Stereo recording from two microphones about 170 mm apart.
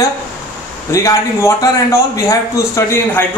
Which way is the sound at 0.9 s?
15° left (ahead or behind).